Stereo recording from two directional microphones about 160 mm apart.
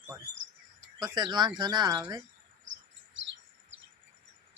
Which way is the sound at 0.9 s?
25° right (ahead or behind).